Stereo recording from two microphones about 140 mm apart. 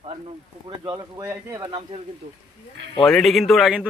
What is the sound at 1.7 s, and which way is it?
Speech, 40° right (ahead or behind).